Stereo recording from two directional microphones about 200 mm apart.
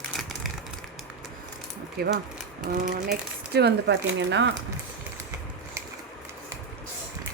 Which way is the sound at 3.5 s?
55° right (ahead or behind).